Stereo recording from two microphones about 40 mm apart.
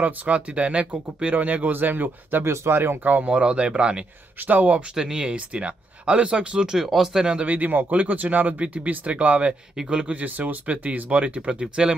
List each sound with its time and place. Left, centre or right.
0.0 s speech: right
1.3 s speech: right
2.4 s speech: right
3.0 s speech: right
3.3 s speech: right
4.4 s speech: right
4.9 s speech: centre
5.3 s speech: right
6.8 s speech: centre
7.4 s speech: right
10.2 s speech: right